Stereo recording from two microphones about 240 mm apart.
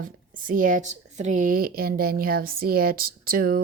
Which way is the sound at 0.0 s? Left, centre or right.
Right.